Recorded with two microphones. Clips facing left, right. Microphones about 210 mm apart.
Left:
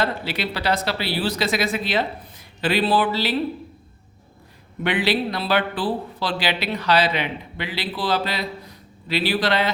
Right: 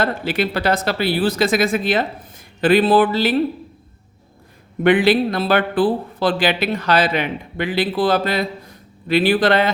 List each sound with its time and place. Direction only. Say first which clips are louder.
0.0 s speech: right 5 dB; 50° right (ahead or behind)
4.8 s speech: right 8 dB; 50° right (ahead or behind)